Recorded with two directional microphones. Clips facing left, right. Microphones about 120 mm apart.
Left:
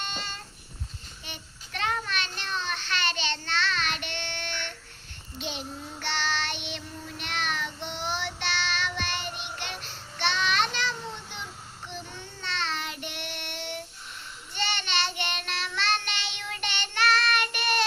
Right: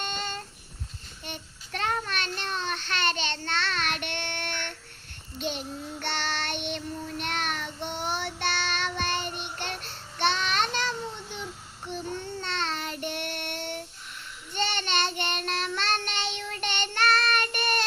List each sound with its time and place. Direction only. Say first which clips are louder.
0.0 s a sound: right 3 dB; 50° right (ahead or behind)
1.2 s child singing: right 5 dB; 45° right (ahead or behind)
12.5 s child singing: left 1 dB; 45° right (ahead or behind)